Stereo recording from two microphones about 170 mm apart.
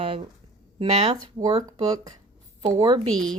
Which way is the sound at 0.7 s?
35° right (ahead or behind).